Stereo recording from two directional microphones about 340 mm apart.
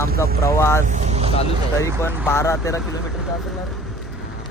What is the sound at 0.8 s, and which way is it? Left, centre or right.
Vehicle, right.